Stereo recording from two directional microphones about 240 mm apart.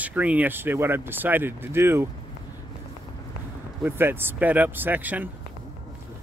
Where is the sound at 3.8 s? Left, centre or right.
Centre.